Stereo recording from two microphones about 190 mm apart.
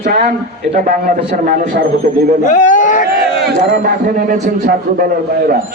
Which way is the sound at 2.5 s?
40° left (ahead or behind).